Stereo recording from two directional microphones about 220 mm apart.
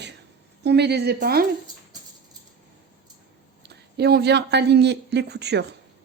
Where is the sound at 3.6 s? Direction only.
50° right (ahead or behind).